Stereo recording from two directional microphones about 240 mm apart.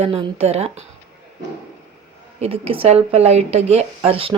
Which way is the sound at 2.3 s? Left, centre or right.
Right.